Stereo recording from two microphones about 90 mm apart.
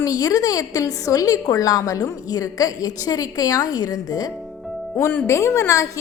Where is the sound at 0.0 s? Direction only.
40° left (ahead or behind).